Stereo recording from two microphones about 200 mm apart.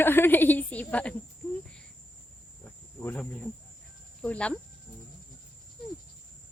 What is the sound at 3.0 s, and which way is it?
Speech, 10° left (ahead or behind).